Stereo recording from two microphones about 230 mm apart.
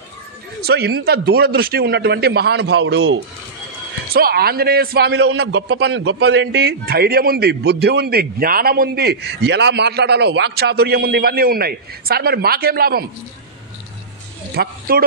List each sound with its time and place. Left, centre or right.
0.6 s a man's voice: right
4.1 s a man's voice: right
14.5 s speech: right